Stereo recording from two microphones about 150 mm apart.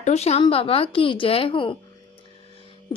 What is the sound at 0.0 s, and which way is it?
Speech, 45° left (ahead or behind).